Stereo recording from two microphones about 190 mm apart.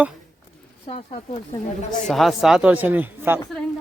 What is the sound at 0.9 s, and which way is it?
Speech, 35° left (ahead or behind).